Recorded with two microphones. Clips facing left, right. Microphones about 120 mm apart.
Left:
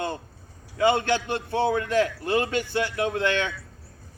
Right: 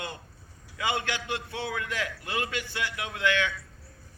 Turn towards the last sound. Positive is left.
turn(degrees=35)  # may be behind; listen again after turning